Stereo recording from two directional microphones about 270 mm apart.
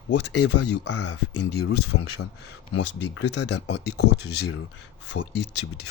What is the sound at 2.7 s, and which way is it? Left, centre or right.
Speech, left.